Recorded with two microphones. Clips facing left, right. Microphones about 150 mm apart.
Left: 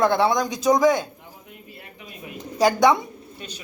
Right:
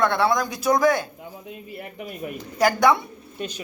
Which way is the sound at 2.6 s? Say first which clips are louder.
Left 1 dB; 20° left (ahead or behind).